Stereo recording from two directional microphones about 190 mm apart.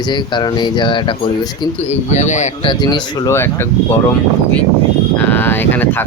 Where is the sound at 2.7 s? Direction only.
20° left (ahead or behind).